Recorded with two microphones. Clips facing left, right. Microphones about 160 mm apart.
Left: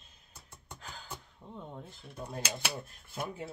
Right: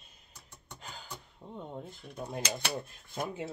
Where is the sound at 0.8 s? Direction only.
15° right (ahead or behind).